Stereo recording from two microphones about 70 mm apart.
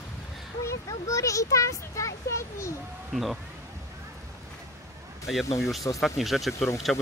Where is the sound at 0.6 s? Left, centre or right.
Left.